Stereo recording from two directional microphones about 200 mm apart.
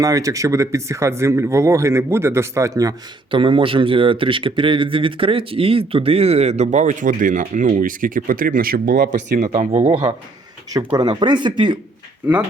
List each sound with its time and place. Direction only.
0.0 s speech: 15° right (ahead or behind); by 9.8 s 35° right (ahead or behind)
9.8 s speech: 15° right (ahead or behind)